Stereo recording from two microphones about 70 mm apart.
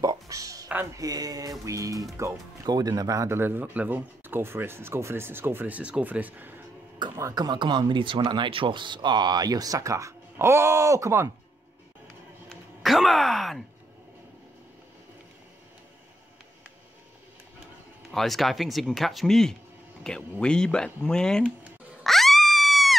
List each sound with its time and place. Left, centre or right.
0.0 s a sound: right
0.9 s speech: right
2.6 s speech: right
3.3 s speech: right
5.8 s speech: centre
7.3 s speech: right
12.8 s speech: centre
18.1 s speech: centre
22.0 s a sound: centre